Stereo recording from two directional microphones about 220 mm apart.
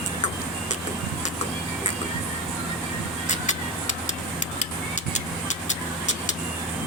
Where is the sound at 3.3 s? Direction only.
35° left (ahead or behind).